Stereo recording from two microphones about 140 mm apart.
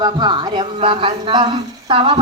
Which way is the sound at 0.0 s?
30° right (ahead or behind).